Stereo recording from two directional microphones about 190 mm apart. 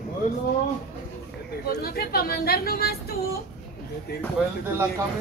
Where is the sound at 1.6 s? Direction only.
50° left (ahead or behind).